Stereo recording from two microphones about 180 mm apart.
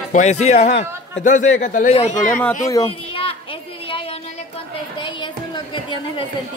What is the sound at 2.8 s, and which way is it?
Children playing, 30° left (ahead or behind).